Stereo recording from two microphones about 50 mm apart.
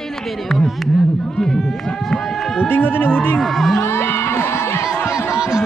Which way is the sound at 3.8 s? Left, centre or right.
Left.